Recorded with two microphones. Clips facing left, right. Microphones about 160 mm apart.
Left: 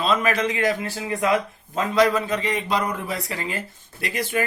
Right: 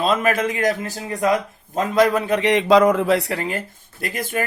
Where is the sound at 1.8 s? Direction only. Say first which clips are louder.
Right 2 dB; 50° right (ahead or behind).